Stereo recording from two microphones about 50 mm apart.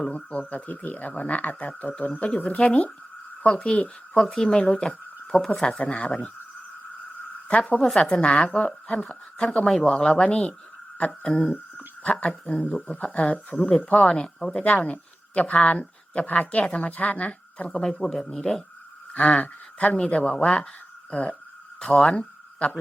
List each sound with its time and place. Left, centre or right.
0.3 s a woman's voice: left
4.2 s speech: centre
4.4 s a man's voice: centre
5.8 s a woman's voice: left
7.4 s speech: left
7.9 s a man's voice: centre
8.2 s a woman's voice: left
10.9 s a woman's voice: left
17.7 s a man's voice: centre
19.1 s a woman's voice: left
22.2 s a sound: left